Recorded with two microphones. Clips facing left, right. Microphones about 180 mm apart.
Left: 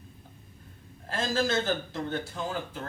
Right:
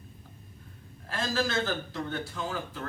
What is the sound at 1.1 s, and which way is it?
A man's voice, 25° left (ahead or behind).